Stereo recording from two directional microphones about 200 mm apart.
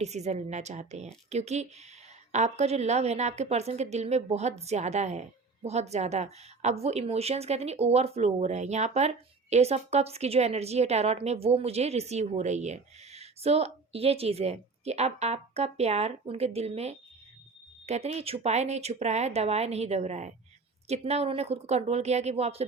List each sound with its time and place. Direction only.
0.0 s a woman's voice: 35° right (ahead or behind)